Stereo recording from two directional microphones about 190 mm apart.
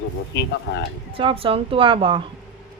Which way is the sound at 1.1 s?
30° right (ahead or behind).